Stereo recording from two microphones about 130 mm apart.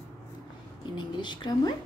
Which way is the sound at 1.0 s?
35° left (ahead or behind).